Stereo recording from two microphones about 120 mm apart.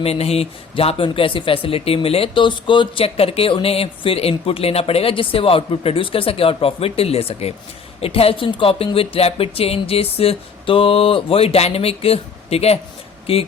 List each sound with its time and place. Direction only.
0.0 s speech: 55° left (ahead or behind)